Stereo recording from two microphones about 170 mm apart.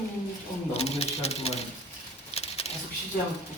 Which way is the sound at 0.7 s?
40° left (ahead or behind).